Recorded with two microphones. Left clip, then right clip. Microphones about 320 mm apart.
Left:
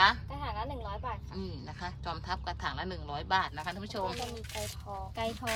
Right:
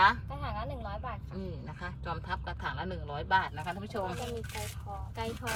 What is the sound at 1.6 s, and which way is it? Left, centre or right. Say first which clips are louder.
Speech: left 1 dB; centre.